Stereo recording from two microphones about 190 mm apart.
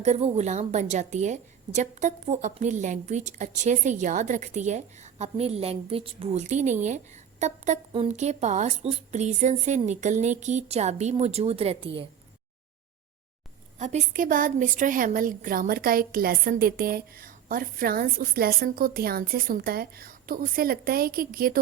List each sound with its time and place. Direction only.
0.0 s a woman's voice: 35° right (ahead or behind)
13.7 s a woman's voice: 40° right (ahead or behind)